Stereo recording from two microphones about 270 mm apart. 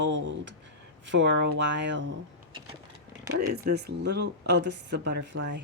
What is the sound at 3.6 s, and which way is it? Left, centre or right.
Speech, right.